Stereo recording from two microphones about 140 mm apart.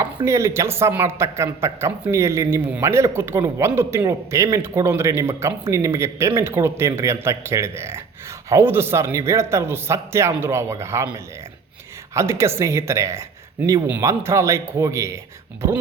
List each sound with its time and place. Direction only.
0.0 s speech: 25° right (ahead or behind)